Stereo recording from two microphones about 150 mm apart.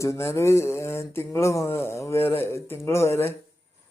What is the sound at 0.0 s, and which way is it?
Speech, 20° left (ahead or behind).